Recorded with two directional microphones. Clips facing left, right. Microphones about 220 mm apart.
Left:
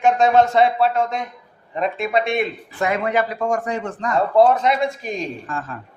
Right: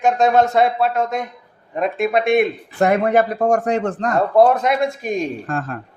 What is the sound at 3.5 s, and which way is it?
Speech, 70° right (ahead or behind).